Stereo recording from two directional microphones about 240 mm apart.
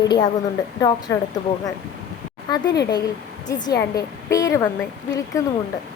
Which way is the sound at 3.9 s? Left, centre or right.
Centre.